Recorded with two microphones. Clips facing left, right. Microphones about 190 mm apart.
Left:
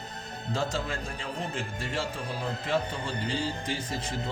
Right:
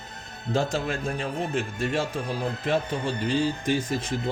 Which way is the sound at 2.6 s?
50° right (ahead or behind).